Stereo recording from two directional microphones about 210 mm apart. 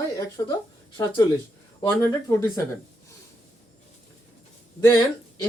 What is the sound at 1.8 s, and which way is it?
Speech, 15° left (ahead or behind).